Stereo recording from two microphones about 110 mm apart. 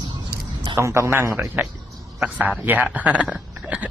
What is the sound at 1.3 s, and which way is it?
A man's voice, 5° right (ahead or behind).